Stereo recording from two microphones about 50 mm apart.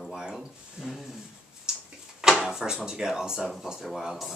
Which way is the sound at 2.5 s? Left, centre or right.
Centre.